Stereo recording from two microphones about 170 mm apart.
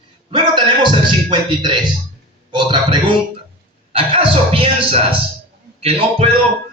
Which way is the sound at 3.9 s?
30° right (ahead or behind).